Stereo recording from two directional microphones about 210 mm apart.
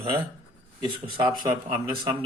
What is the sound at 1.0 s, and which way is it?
Speech, 25° right (ahead or behind).